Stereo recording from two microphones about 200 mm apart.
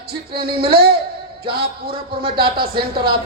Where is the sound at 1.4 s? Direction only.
50° right (ahead or behind).